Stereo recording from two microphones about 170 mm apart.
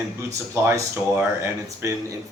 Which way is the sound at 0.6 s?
15° right (ahead or behind).